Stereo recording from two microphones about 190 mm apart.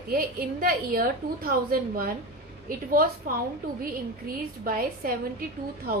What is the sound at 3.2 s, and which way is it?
Speech, 50° right (ahead or behind).